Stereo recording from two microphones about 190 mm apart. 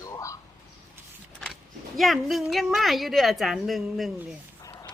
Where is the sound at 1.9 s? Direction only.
Centre (ahead or behind).